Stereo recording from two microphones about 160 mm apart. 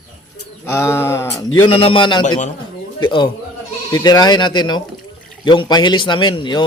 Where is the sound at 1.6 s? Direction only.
35° left (ahead or behind).